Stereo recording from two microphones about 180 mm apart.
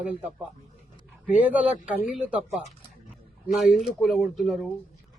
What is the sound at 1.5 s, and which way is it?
A man's voice, 10° right (ahead or behind).